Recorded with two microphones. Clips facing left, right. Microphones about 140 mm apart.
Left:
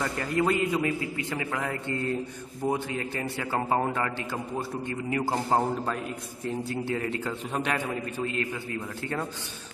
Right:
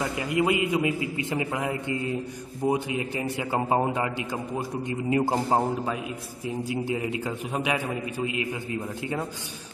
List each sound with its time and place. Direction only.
0.0 s a man's voice: 10° right (ahead or behind)
5.5 s a man's voice: 5° right (ahead or behind)